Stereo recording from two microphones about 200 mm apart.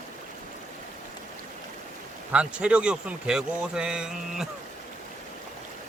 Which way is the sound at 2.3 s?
5° right (ahead or behind).